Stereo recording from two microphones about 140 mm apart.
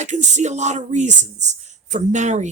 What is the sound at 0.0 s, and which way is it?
Speech, 55° right (ahead or behind).